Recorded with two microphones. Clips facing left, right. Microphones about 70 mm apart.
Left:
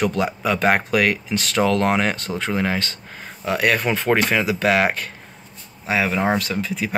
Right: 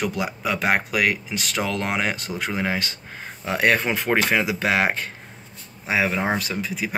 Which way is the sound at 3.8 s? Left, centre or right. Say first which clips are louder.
Left 2 dB; centre.